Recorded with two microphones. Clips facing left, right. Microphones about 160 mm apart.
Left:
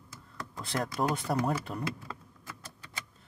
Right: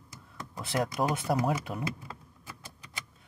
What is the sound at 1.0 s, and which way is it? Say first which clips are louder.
Speech: even; 15° right (ahead or behind).